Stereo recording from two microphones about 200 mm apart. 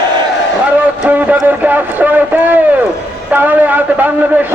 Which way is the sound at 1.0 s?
5° right (ahead or behind).